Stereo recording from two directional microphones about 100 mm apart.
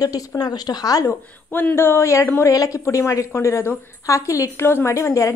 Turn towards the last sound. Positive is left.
turn(degrees=30)  # may be behind; listen again after turning